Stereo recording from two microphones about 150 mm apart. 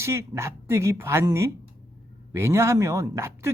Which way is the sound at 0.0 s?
20° right (ahead or behind).